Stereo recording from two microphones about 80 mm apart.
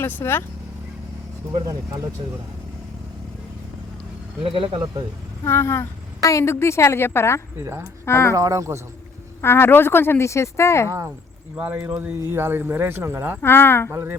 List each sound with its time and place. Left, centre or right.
0.0 s speech: left
4.6 s speech: right
5.5 s speech: left
7.6 s speech: right
8.0 s speech: left
8.4 s speech: right
9.4 s speech: left
11.5 s speech: right
13.4 s speech: left
13.9 s speech: right